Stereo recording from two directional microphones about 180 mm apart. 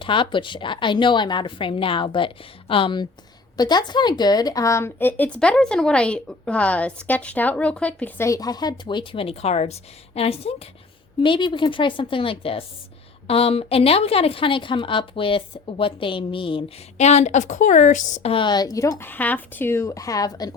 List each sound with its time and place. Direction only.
0.0 s a woman's voice: 30° left (ahead or behind)